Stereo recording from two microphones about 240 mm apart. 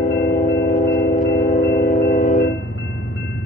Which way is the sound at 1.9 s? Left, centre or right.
Left.